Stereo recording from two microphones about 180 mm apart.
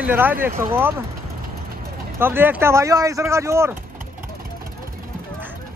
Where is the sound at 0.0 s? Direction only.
10° right (ahead or behind).